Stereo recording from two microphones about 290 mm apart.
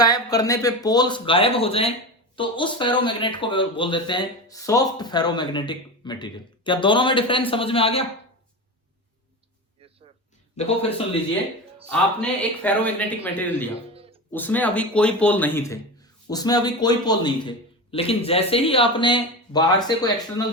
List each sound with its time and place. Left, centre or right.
0.0 s speech: centre
10.6 s a man's voice: left
11.9 s speech: centre